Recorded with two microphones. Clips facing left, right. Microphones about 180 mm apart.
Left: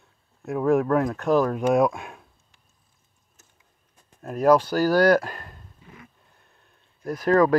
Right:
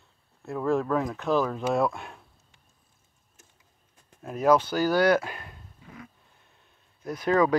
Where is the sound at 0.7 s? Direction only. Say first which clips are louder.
Left 5 dB; 10° left (ahead or behind).